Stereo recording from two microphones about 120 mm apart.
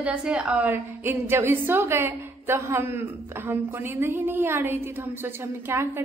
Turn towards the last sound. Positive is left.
turn(degrees=-20)  # may be behind; listen again after turning